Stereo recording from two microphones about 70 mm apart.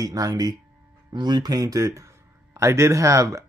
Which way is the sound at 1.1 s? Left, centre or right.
Right.